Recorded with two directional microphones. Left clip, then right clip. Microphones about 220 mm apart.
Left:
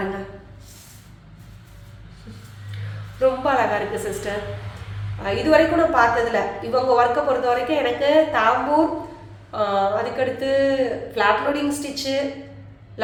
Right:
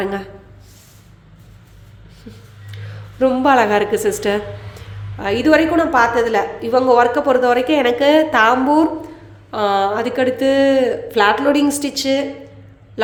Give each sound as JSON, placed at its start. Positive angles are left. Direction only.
{"t": 3.2, "sound": "a woman's voice", "side_deg": -50}